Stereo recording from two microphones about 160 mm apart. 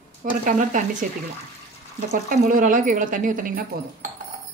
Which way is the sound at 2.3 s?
55° right (ahead or behind).